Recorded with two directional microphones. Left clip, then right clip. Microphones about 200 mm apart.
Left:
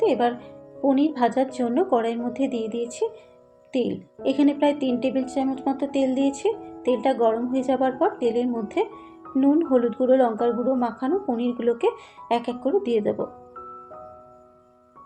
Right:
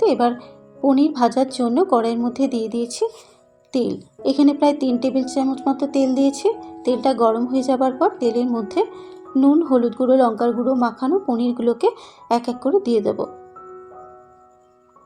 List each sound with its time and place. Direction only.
0.0 s a woman's voice: 40° right (ahead or behind)